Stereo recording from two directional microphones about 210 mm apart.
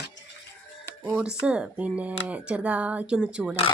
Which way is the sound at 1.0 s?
5° right (ahead or behind).